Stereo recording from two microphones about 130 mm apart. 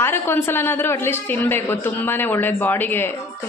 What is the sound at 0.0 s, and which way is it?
A woman's voice, 20° left (ahead or behind).